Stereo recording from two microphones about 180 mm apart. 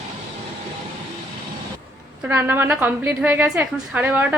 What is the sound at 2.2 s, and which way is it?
A woman's voice, 10° right (ahead or behind).